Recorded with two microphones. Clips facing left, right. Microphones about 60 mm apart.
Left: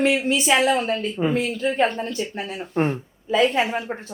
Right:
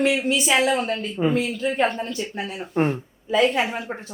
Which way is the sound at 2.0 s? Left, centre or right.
Left.